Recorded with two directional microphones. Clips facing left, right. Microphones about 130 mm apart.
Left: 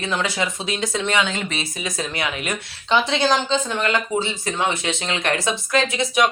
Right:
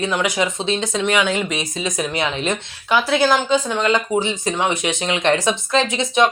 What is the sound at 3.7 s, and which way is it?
A woman's voice, 20° right (ahead or behind).